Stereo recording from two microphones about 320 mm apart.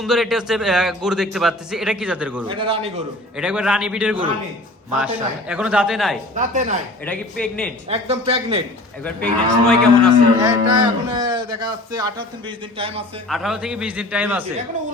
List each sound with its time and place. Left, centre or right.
0.0 s a man's voice: centre
2.5 s speech: centre
3.3 s a man's voice: centre
6.3 s speech: right
7.0 s a man's voice: centre
7.9 s speech: centre
9.0 s a man's voice: centre
10.4 s speech: centre
13.2 s a man's voice: centre